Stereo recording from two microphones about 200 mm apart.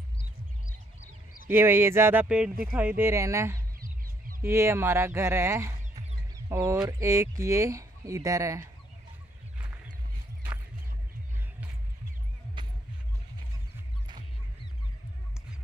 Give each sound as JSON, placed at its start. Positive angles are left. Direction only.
{"t": 1.5, "sound": "speech", "side_deg": -10}
{"t": 9.6, "sound": "a sound", "side_deg": -5}
{"t": 12.6, "sound": "music", "side_deg": -25}